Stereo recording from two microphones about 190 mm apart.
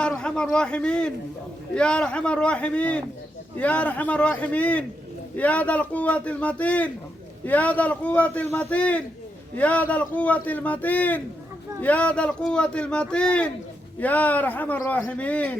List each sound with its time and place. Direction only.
0.0 s a man's voice: 5° left (ahead or behind)